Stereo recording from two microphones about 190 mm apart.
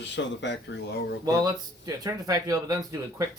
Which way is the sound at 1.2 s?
20° right (ahead or behind).